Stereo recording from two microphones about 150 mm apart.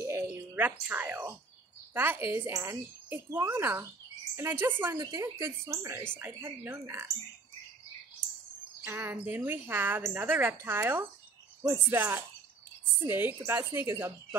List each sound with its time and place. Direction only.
0.0 s a sound: 20° right (ahead or behind)
2.0 s a woman's voice: 15° right (ahead or behind)
8.8 s a woman's voice: 15° right (ahead or behind)